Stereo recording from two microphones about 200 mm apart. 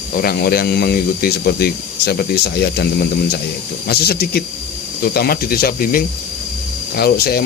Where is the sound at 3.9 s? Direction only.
50° left (ahead or behind).